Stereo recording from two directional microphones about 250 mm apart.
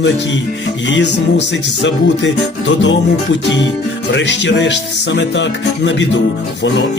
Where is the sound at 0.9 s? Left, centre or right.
Left.